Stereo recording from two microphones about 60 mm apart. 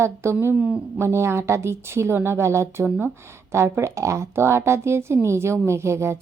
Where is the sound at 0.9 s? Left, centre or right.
Right.